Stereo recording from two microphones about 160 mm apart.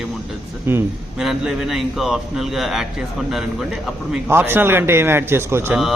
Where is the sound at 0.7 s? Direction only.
15° right (ahead or behind).